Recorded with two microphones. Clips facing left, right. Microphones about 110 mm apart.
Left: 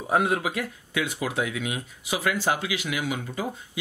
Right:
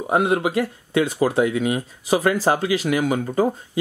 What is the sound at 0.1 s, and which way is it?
Speech, 20° right (ahead or behind).